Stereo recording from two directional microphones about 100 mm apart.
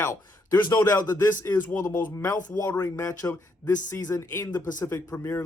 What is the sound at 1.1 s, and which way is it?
Speech, 20° left (ahead or behind).